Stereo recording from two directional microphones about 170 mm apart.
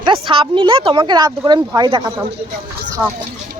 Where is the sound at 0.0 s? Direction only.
30° right (ahead or behind).